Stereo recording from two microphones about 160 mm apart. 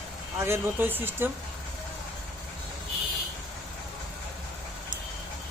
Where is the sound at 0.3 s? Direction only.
15° right (ahead or behind).